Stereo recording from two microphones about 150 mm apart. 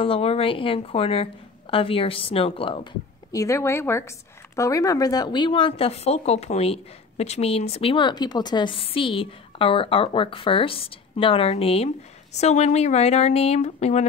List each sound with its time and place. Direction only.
0.0 s speech: 40° left (ahead or behind)
3.3 s speech: 20° left (ahead or behind); by 14.0 s 45° left (ahead or behind)